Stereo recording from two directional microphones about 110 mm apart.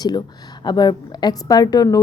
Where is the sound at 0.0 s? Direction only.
40° left (ahead or behind).